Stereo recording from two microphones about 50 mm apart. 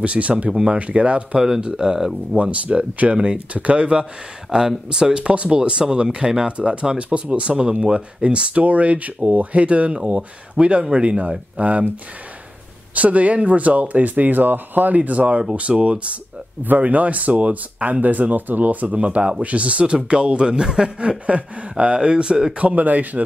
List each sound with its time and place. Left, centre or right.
0.0 s speech: right
0.5 s speech: centre
0.7 s speech: right
1.4 s speech: centre
2.3 s speech: right
4.5 s speech: centre; by 11.9 s right
12.9 s speech: right; by 20.9 s centre
21.3 s speech: right